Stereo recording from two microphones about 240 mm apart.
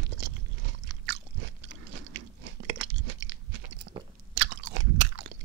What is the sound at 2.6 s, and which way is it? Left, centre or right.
Crunch, right.